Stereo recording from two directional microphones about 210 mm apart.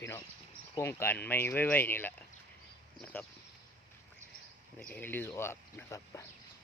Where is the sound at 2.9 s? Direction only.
5° left (ahead or behind).